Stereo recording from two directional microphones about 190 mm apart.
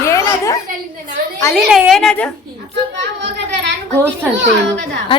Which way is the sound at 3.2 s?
65° right (ahead or behind).